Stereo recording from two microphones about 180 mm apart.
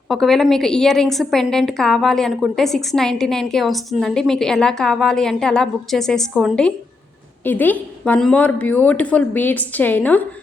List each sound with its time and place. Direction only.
0.1 s a woman's voice: centre (ahead or behind)